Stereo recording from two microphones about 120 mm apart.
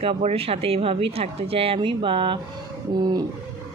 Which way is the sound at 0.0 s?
55° right (ahead or behind).